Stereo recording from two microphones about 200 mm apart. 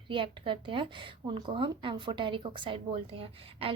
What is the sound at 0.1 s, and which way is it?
A woman's voice, 25° right (ahead or behind).